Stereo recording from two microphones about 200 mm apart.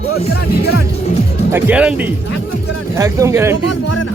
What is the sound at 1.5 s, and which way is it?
Speech, 10° right (ahead or behind).